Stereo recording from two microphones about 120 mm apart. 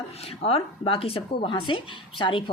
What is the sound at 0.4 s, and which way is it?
A woman's voice, 55° left (ahead or behind).